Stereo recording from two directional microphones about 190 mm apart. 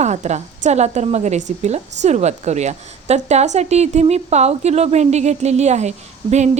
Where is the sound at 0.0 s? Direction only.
35° right (ahead or behind).